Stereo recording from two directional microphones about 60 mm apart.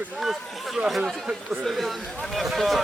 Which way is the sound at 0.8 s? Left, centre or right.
Centre.